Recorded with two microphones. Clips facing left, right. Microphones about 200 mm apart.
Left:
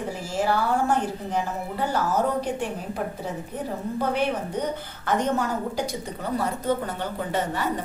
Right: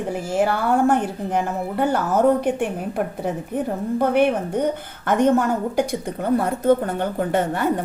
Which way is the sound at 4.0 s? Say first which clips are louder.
Right 7 dB; 55° right (ahead or behind).